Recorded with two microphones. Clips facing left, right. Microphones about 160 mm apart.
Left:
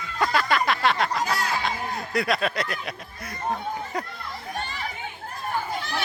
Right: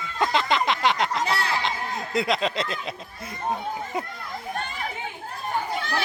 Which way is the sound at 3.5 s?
20° right (ahead or behind).